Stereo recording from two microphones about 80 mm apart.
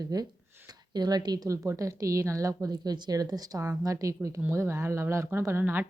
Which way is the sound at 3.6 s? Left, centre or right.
Right.